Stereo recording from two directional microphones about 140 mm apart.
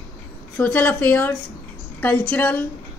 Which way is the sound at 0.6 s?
10° left (ahead or behind).